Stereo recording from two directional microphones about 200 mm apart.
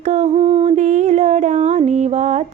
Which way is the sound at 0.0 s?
35° right (ahead or behind).